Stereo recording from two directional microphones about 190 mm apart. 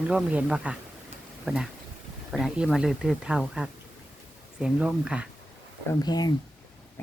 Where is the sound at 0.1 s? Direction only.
5° right (ahead or behind).